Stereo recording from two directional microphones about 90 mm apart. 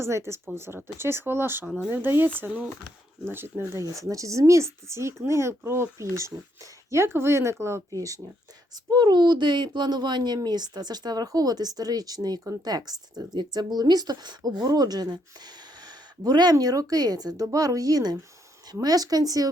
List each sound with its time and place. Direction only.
0.0 s speech: 30° right (ahead or behind)
4.0 s speech: 35° right (ahead or behind)
8.9 s speech: 50° right (ahead or behind)